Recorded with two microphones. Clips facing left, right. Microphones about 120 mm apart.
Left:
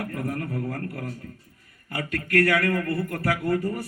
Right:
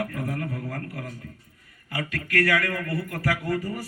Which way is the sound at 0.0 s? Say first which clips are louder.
Even; 40° left (ahead or behind).